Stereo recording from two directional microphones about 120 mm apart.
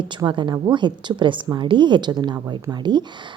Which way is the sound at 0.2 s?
40° right (ahead or behind).